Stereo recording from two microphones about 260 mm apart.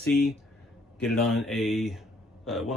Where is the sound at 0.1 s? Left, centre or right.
Left.